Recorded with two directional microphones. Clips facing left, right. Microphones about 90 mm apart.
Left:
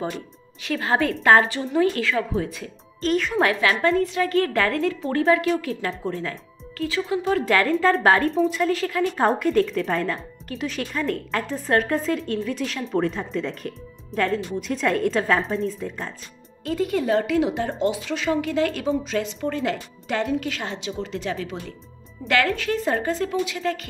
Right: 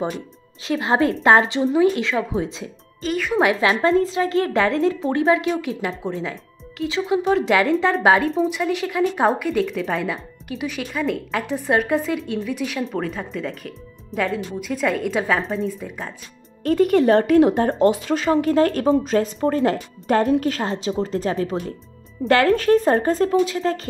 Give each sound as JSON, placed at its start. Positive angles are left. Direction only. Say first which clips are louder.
{"t": 0.0, "sound": "a woman's voice", "louder": "right 3 dB", "side_deg": -25}
{"t": 3.0, "sound": "speech", "louder": "right 1 dB", "side_deg": -5}
{"t": 3.8, "sound": "a woman's voice", "louder": "right 3 dB", "side_deg": -25}
{"t": 8.5, "sound": "speech", "louder": "even", "side_deg": -15}
{"t": 16.6, "sound": "speech", "louder": "right 7 dB", "side_deg": -55}